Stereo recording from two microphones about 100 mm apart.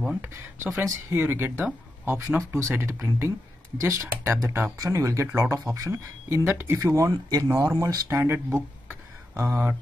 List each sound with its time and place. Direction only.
0.1 s speech: 20° right (ahead or behind)